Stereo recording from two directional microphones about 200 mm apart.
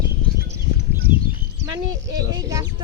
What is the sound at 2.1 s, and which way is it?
Speech, 20° right (ahead or behind).